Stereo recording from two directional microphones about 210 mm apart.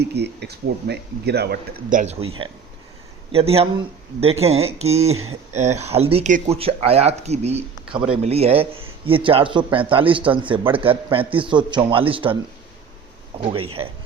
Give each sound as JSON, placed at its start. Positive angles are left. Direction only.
{"t": 0.0, "sound": "speech", "side_deg": -50}
{"t": 3.3, "sound": "a man's voice", "side_deg": -30}
{"t": 5.1, "sound": "speech", "side_deg": -80}
{"t": 5.5, "sound": "a man's voice", "side_deg": -30}